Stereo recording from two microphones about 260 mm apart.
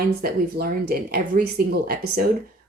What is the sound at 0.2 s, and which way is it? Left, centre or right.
Speech, right.